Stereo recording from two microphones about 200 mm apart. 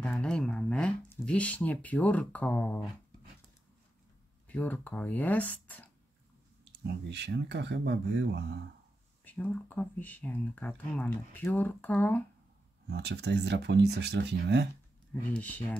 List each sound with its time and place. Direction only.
0.0 s speech: 5° left (ahead or behind)
4.5 s speech: 5° left (ahead or behind)
6.6 s speech: 60° right (ahead or behind)
9.2 s speech: 10° left (ahead or behind)
12.9 s speech: 60° right (ahead or behind)
15.3 s speech: 5° left (ahead or behind)